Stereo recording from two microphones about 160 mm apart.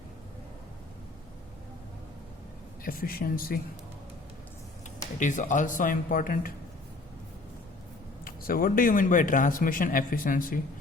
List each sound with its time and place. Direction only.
2.8 s speech: 65° left (ahead or behind)
5.2 s speech: 50° left (ahead or behind)
8.2 s speech: 65° left (ahead or behind)